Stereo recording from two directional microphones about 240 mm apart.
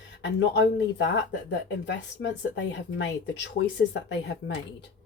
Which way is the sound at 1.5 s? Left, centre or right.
Left.